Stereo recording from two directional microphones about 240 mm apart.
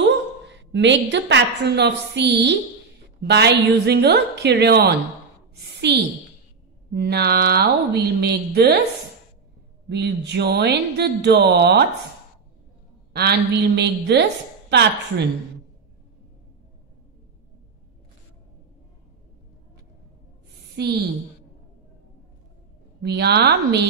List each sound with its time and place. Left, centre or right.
0.5 s a woman's voice: right
9.8 s a woman's voice: right
13.1 s a woman's voice: right
20.7 s a woman's voice: right
23.0 s a woman's voice: right